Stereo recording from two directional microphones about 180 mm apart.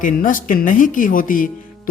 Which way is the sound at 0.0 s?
50° left (ahead or behind).